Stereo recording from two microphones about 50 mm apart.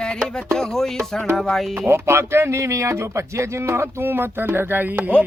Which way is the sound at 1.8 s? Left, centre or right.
Right.